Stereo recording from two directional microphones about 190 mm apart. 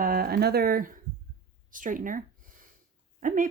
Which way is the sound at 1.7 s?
45° right (ahead or behind).